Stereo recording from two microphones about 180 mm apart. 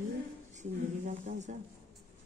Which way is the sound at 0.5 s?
40° right (ahead or behind).